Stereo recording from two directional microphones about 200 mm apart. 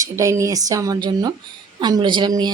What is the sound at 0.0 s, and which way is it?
Speech, 15° right (ahead or behind).